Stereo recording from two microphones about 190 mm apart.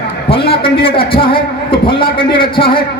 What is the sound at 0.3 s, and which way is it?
A man's voice, 30° left (ahead or behind).